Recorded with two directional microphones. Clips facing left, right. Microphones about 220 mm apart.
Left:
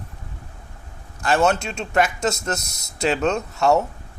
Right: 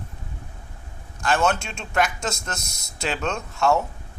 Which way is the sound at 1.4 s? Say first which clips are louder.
Left 4 dB; 40° left (ahead or behind).